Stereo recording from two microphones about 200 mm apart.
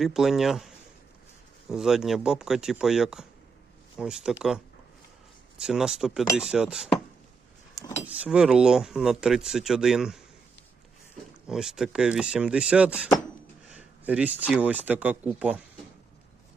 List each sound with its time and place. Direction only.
0.0 s speech: centre (ahead or behind)
1.7 s speech: centre (ahead or behind)
7.8 s vehicle: 15° left (ahead or behind)
8.0 s speech: 5° right (ahead or behind)
11.4 s speech: centre (ahead or behind)